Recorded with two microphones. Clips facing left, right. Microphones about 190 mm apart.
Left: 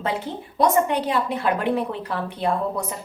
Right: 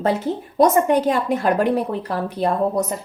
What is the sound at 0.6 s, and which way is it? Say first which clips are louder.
Speech: right 4 dB; 45° right (ahead or behind).